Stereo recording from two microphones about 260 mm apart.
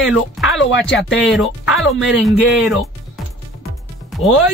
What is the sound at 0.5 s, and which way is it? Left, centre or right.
Speech, left.